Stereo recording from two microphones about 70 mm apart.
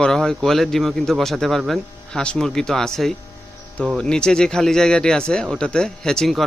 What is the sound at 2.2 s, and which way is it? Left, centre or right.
A man's voice, centre.